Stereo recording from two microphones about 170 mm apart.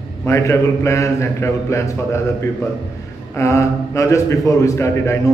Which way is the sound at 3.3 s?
15° left (ahead or behind).